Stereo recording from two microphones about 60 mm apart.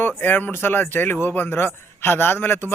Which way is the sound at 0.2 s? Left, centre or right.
Left.